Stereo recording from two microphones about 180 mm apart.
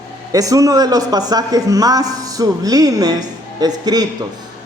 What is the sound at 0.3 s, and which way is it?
A man's voice, 20° right (ahead or behind).